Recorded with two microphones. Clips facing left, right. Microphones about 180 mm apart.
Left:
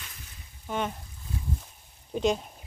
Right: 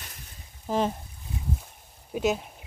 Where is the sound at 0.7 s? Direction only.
30° right (ahead or behind).